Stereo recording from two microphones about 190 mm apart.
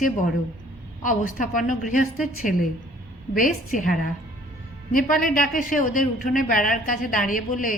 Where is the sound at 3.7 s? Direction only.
45° left (ahead or behind).